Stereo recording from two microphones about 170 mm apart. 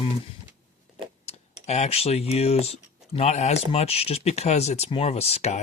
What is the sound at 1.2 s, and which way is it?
Speech, 40° left (ahead or behind).